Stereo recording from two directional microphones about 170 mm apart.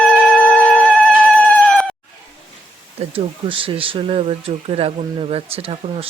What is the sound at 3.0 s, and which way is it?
Speech, 35° right (ahead or behind).